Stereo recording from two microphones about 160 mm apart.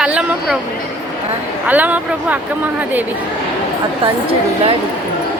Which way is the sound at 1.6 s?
10° right (ahead or behind).